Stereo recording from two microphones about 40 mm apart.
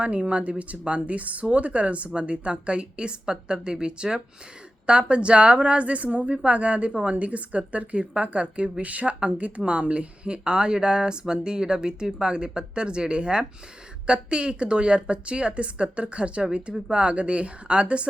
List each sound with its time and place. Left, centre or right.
0.0 s a woman's voice: right